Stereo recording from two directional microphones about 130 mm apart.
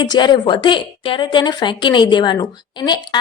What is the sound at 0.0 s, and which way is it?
A woman's voice, 35° left (ahead or behind).